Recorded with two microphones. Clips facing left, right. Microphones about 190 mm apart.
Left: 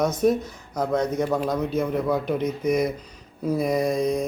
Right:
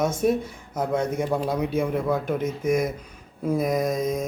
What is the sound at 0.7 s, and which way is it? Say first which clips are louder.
Speech: left 1 dB; 10° right (ahead or behind).